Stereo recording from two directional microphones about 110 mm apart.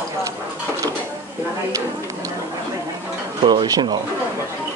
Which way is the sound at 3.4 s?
40° right (ahead or behind).